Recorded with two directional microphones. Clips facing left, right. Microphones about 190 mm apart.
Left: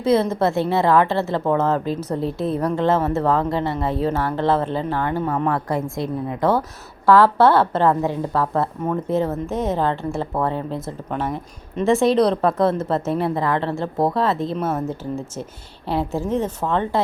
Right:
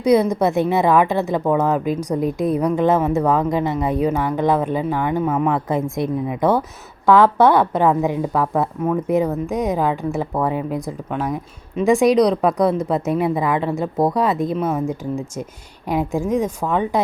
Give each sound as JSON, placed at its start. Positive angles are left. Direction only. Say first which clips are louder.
{"t": 0.0, "sound": "a woman's voice", "louder": "right 2 dB", "side_deg": -15}
{"t": 5.5, "sound": "a woman's voice", "louder": "right 2 dB", "side_deg": -20}
{"t": 10.8, "sound": "speech", "louder": "right 2 dB", "side_deg": 0}
{"t": 13.1, "sound": "a woman's voice", "louder": "right 3 dB", "side_deg": -15}
{"t": 13.7, "sound": "speech", "louder": "right 2 dB", "side_deg": 0}
{"t": 14.2, "sound": "a woman's voice", "louder": "right 2 dB", "side_deg": -15}
{"t": 14.5, "sound": "speech", "louder": "right 2 dB", "side_deg": 0}
{"t": 14.8, "sound": "a woman's voice", "louder": "right 3 dB", "side_deg": -10}